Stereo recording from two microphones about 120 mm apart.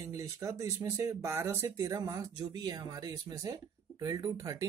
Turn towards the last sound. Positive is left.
turn(degrees=-30)  # may be behind; listen again after turning